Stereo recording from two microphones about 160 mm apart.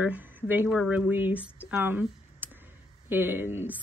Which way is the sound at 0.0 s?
10° right (ahead or behind).